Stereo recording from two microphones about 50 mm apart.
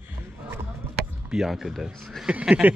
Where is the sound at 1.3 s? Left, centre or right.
Centre.